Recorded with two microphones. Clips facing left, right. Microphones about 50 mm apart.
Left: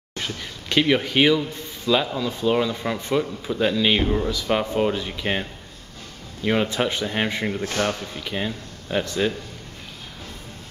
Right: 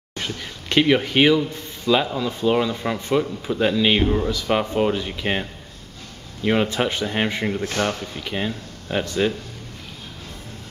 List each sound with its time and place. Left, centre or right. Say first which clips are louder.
0.1 s speech: right 1 dB; centre